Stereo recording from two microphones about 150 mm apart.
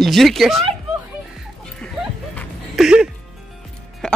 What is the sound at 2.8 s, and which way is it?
Speech, 5° right (ahead or behind).